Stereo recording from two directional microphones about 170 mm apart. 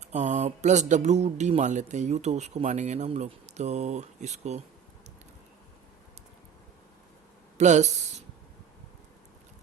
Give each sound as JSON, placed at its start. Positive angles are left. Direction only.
{"t": 0.0, "sound": "speech", "side_deg": -45}
{"t": 7.6, "sound": "speech", "side_deg": -45}